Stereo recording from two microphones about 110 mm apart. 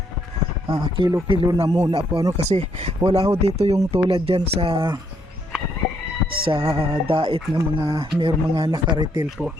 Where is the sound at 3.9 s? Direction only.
60° right (ahead or behind).